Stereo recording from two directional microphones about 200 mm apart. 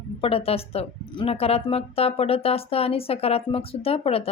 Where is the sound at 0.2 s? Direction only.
30° left (ahead or behind).